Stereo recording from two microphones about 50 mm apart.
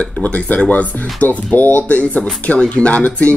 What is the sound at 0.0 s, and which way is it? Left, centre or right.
Speech, left.